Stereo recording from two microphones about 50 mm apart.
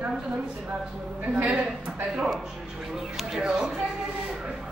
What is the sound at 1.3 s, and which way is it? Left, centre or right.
Speech, right.